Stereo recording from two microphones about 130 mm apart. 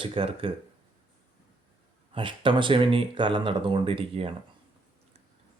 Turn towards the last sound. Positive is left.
turn(degrees=-45)  # may be behind; listen again after turning